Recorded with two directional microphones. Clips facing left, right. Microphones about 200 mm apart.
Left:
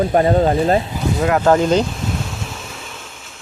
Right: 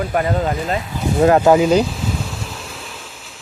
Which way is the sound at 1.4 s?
5° right (ahead or behind).